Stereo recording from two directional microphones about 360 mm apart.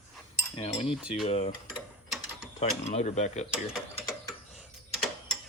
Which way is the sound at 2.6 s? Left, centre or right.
Centre.